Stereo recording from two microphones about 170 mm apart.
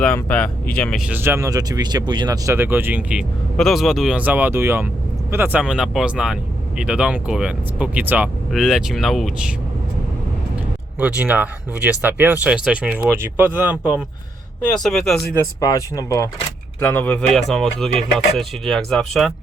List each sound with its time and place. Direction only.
0.0 s speech: 5° left (ahead or behind)
11.0 s speech: 10° right (ahead or behind)
15.4 s speech: 20° left (ahead or behind); by 19.3 s centre (ahead or behind)